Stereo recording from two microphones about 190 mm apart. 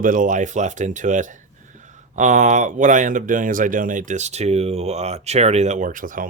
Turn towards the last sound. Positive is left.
turn(degrees=-45)  # may be behind; listen again after turning